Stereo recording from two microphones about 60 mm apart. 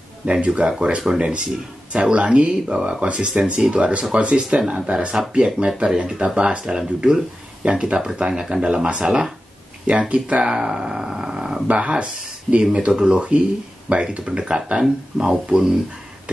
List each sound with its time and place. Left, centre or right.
0.2 s speech: centre